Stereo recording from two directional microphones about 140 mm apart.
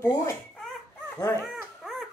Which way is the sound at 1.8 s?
Centre (ahead or behind).